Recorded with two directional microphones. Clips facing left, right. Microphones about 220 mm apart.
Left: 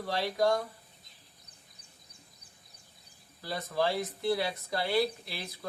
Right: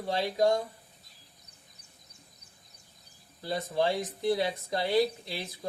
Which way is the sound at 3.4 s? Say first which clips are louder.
Right 2 dB; 20° right (ahead or behind).